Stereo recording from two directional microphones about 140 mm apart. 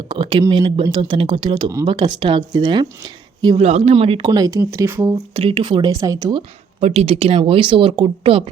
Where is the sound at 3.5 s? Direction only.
50° right (ahead or behind).